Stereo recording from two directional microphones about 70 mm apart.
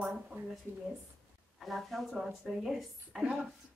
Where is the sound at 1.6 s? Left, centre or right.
Centre.